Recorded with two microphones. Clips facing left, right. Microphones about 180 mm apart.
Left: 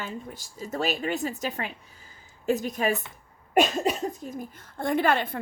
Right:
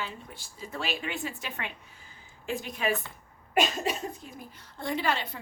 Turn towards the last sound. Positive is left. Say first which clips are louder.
# left 6 dB
turn(degrees=55)  # may be behind; listen again after turning